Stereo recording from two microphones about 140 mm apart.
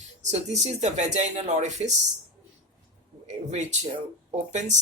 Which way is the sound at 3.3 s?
55° right (ahead or behind).